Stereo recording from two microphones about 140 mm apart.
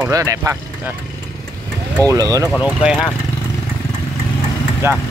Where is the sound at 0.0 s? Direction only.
20° right (ahead or behind).